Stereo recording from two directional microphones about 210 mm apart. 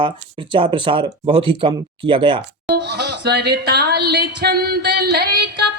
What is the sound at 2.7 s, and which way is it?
Speech, 50° right (ahead or behind).